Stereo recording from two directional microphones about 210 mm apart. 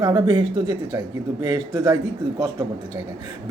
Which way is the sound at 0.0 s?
20° right (ahead or behind).